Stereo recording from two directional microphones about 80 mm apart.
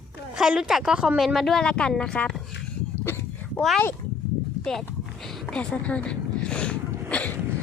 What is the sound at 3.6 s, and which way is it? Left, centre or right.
Speech, centre.